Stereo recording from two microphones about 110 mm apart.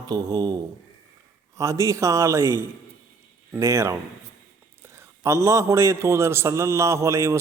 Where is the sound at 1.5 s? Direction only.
30° right (ahead or behind).